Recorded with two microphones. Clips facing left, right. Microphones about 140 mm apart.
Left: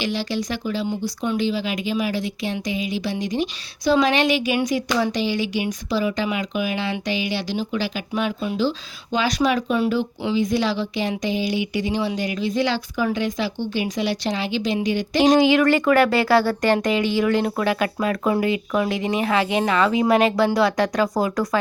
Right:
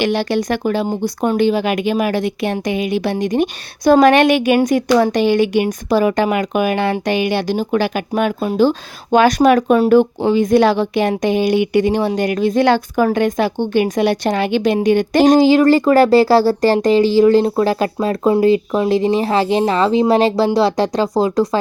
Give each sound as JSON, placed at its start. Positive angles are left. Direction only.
{"t": 0.0, "sound": "speech", "side_deg": -60}
{"t": 15.4, "sound": "speech", "side_deg": -35}